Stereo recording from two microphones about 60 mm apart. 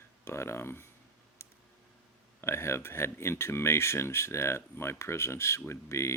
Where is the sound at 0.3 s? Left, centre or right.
Left.